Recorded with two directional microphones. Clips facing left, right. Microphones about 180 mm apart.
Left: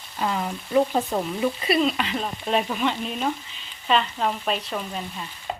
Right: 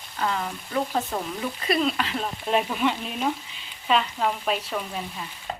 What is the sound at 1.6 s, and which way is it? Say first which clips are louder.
Speech: right 1 dB; 5° left (ahead or behind).